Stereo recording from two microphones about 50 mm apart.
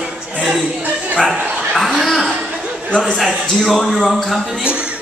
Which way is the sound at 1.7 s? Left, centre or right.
Centre.